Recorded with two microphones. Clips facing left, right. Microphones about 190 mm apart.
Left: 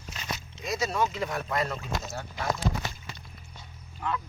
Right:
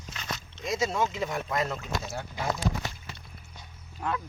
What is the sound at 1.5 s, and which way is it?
Speech, 5° right (ahead or behind).